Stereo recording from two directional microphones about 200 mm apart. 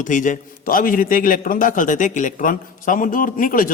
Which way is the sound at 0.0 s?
40° left (ahead or behind).